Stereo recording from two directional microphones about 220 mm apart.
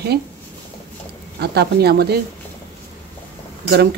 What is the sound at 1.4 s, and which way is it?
Speech, 45° right (ahead or behind).